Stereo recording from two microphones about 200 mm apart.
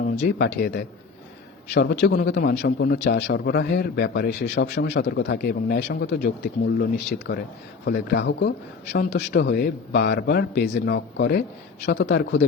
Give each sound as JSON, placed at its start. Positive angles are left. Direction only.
{"t": 0.0, "sound": "a man's voice", "side_deg": 50}